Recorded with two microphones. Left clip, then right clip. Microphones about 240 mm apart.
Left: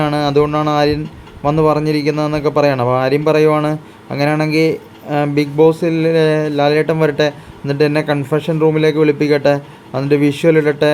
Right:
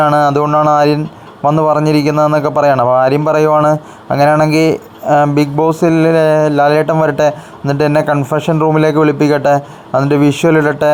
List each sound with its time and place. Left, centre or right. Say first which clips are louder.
0.0 s a man's voice: right 4 dB; centre